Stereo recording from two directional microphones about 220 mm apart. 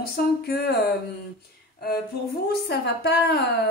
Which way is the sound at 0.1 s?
45° left (ahead or behind).